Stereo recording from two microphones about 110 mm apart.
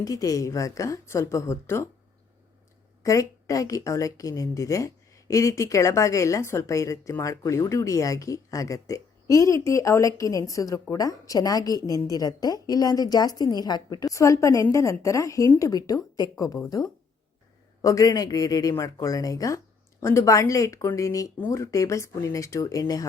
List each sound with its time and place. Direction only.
0.0 s a woman's voice: 30° left (ahead or behind)
3.0 s a woman's voice: 30° left (ahead or behind)
14.1 s a woman's voice: 30° left (ahead or behind)